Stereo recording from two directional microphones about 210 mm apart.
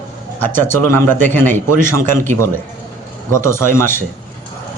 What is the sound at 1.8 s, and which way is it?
Speech, 40° right (ahead or behind).